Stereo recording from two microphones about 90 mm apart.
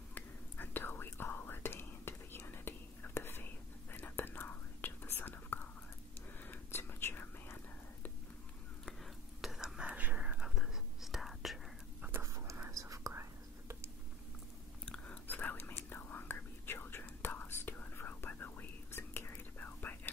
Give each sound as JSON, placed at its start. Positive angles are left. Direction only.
{"t": 0.1, "sound": "whispering", "side_deg": 20}
{"t": 9.4, "sound": "whispering", "side_deg": -5}
{"t": 12.0, "sound": "a sound", "side_deg": -25}
{"t": 12.7, "sound": "whispering", "side_deg": -40}
{"t": 14.9, "sound": "whispering", "side_deg": 15}